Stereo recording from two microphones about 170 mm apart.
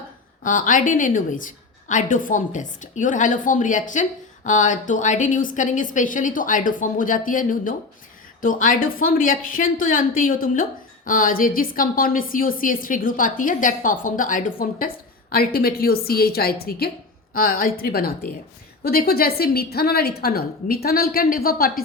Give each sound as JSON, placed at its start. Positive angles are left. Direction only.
{"t": 0.4, "sound": "a woman's voice", "side_deg": 50}